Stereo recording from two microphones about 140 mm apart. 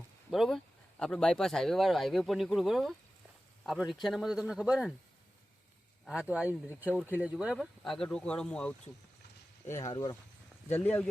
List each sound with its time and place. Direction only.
0.3 s speech: centre (ahead or behind)
6.1 s speech: 10° right (ahead or behind); by 8.7 s 5° left (ahead or behind)
9.6 s speech: 20° left (ahead or behind)
9.9 s speech: 30° left (ahead or behind)
10.7 s speech: 10° left (ahead or behind)